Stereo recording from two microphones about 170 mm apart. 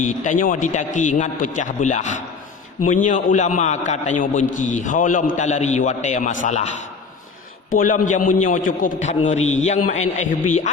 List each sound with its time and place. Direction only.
0.0 s a man's voice: 50° left (ahead or behind)
7.7 s a man's voice: 50° left (ahead or behind)